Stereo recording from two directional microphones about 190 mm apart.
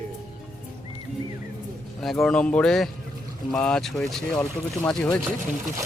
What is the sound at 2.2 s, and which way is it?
Speech, 5° left (ahead or behind).